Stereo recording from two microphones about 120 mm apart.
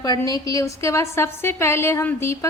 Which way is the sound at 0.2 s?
30° left (ahead or behind).